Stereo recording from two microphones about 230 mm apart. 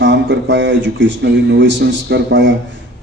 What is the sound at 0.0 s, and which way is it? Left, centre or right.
A man's voice, right.